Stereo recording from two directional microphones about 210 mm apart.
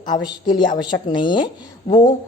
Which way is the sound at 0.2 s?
20° left (ahead or behind).